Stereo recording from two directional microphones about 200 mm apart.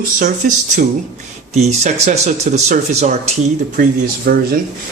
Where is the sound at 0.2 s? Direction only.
40° right (ahead or behind).